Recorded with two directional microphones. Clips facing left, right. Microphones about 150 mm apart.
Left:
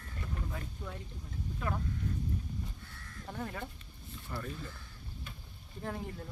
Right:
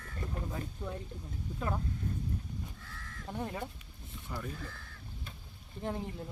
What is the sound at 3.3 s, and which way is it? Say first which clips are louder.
Speech: right 2 dB; 20° right (ahead or behind).